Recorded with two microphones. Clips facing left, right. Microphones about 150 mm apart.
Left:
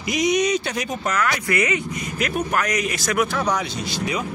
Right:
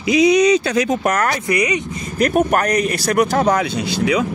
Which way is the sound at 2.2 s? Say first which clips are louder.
Right 8 dB; 45° right (ahead or behind).